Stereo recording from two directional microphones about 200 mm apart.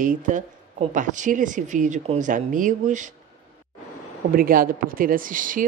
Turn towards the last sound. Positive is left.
turn(degrees=-40)  # may be behind; listen again after turning